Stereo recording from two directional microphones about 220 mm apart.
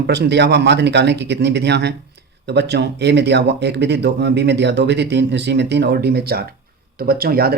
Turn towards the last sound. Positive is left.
turn(degrees=-45)  # may be behind; listen again after turning